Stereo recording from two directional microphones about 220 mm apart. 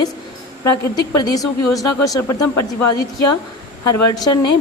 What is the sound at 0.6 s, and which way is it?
A woman's voice, 15° left (ahead or behind).